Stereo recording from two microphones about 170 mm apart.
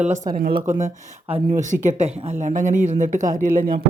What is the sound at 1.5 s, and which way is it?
Speech, 50° right (ahead or behind).